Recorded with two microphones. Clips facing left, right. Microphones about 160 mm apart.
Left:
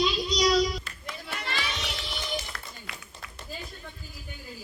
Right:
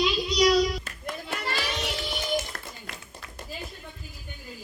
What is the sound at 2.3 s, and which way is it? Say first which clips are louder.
Run: right 5 dB; 45° right (ahead or behind).